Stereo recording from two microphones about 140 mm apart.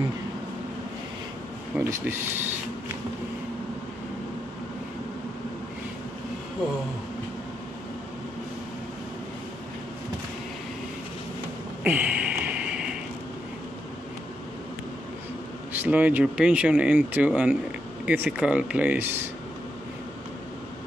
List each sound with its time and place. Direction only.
1.7 s speech: 15° right (ahead or behind)
11.8 s a sound: 10° right (ahead or behind)
15.7 s speech: 10° right (ahead or behind)